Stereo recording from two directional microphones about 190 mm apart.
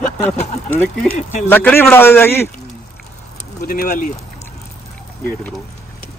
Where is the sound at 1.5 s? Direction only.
10° left (ahead or behind).